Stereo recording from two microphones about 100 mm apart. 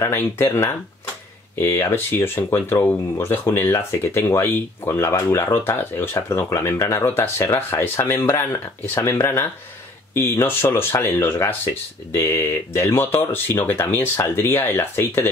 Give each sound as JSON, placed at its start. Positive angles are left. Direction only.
{"t": 0.0, "sound": "speech", "side_deg": 25}